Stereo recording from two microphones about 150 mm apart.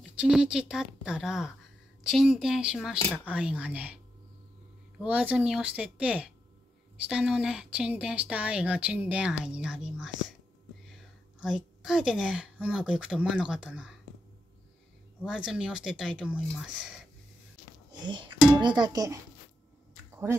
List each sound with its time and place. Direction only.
0.0 s a woman's voice: 5° right (ahead or behind)
11.3 s a woman's voice: 5° right (ahead or behind)
15.2 s a woman's voice: 5° right (ahead or behind)
18.0 s speech: 30° right (ahead or behind)